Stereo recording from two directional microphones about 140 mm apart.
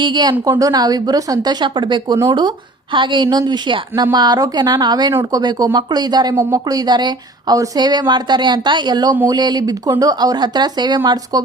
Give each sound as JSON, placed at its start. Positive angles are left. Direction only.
{"t": 0.0, "sound": "speech", "side_deg": -30}
{"t": 6.3, "sound": "speech", "side_deg": -20}